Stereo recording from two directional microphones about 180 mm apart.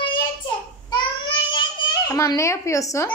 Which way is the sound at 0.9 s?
25° left (ahead or behind).